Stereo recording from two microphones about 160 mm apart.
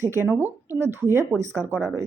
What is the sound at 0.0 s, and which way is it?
Speech, 15° right (ahead or behind).